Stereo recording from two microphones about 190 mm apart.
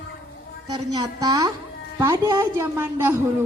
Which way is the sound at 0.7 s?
20° right (ahead or behind).